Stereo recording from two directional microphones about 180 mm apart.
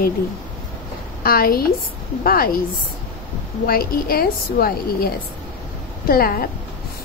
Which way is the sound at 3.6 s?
55° left (ahead or behind).